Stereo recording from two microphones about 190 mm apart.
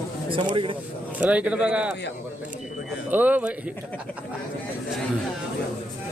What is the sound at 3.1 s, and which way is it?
Speech, 10° right (ahead or behind).